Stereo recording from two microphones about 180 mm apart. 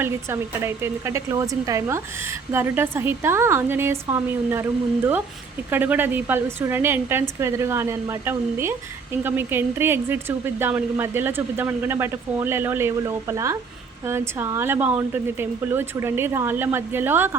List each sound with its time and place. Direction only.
0.0 s speech: 15° right (ahead or behind)
5.7 s speech: 10° right (ahead or behind)